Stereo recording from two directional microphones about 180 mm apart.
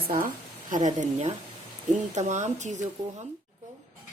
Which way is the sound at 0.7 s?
45° right (ahead or behind).